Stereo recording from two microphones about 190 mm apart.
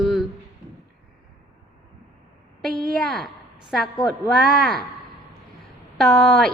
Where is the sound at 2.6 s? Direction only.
Centre (ahead or behind).